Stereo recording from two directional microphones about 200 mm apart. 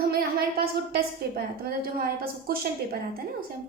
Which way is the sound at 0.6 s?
50° right (ahead or behind).